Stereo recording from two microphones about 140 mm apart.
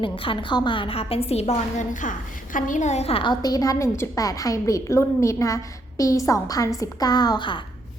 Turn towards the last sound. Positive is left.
turn(degrees=35)  # may be behind; listen again after turning